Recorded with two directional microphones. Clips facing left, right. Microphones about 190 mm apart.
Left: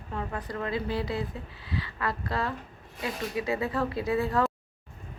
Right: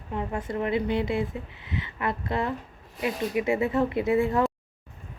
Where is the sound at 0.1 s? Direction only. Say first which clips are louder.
Right 4 dB; 20° right (ahead or behind).